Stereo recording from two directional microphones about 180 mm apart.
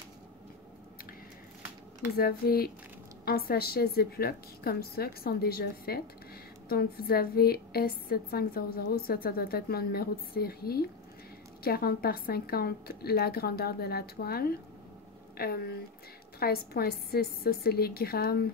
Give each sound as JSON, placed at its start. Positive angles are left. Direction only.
{"t": 2.1, "sound": "a woman's voice", "side_deg": 55}